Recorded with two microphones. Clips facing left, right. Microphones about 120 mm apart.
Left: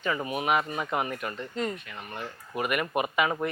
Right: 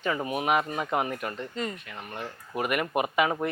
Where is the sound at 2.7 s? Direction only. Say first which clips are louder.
Right 1 dB; 30° right (ahead or behind).